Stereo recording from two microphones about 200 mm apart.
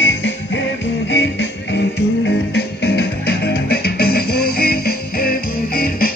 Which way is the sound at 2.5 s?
55° left (ahead or behind).